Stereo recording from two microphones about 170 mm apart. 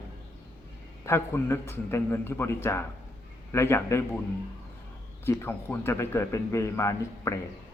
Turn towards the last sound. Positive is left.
turn(degrees=15)  # may be behind; listen again after turning